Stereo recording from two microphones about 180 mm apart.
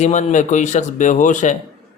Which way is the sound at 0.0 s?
40° left (ahead or behind).